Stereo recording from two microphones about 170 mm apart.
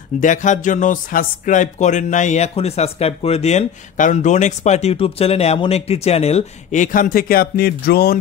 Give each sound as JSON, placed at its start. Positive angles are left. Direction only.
{"t": 0.2, "sound": "speech", "side_deg": 50}